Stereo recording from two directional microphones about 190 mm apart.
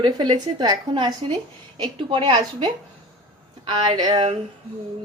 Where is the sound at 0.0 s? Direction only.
25° right (ahead or behind).